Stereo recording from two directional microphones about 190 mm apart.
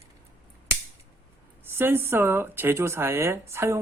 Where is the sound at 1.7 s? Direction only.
10° right (ahead or behind).